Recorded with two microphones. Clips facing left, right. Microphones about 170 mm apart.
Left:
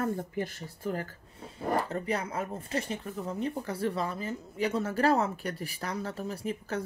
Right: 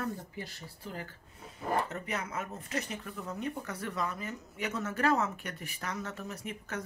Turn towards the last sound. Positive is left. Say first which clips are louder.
# left 6 dB
turn(degrees=30)  # may be behind; listen again after turning